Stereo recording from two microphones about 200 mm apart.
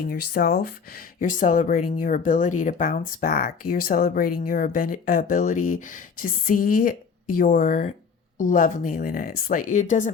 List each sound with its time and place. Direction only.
0.0 s speech: 50° left (ahead or behind)